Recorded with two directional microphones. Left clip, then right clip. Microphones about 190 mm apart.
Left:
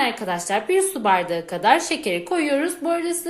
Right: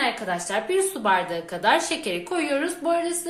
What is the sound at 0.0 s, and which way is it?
A woman's voice, 40° left (ahead or behind).